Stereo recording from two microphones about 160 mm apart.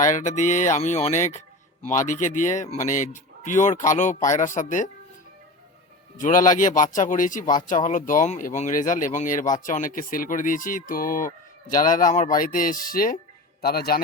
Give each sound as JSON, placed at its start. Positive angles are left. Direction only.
{"t": 0.0, "sound": "speech", "side_deg": 50}
{"t": 6.1, "sound": "speech", "side_deg": 55}
{"t": 13.6, "sound": "a man's voice", "side_deg": 75}